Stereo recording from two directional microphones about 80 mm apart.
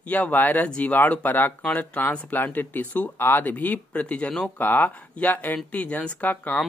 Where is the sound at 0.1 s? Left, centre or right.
Left.